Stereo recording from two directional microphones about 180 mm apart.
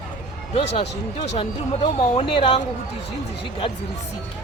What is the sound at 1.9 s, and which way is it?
Speech, 30° left (ahead or behind).